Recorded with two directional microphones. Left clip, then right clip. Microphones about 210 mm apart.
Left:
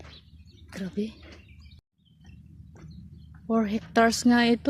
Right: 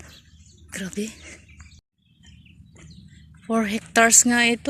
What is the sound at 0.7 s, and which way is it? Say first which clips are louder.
Speech: right 3 dB; 5° right (ahead or behind).